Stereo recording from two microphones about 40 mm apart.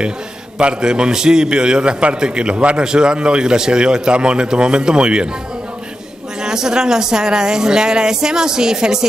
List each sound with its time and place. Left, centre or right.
0.6 s a man's voice: right
6.4 s speech: centre